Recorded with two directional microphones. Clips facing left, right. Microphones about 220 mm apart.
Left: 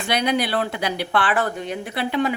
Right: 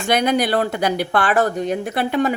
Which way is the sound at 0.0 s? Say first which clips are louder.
Right 4 dB; 45° right (ahead or behind).